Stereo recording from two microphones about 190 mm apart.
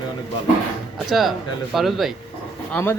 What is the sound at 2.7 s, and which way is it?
Speech, 10° left (ahead or behind).